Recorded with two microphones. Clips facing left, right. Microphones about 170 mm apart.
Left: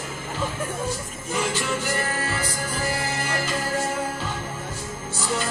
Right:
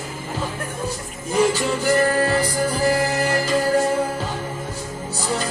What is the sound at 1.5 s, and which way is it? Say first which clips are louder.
Music: right 7 dB; 35° right (ahead or behind).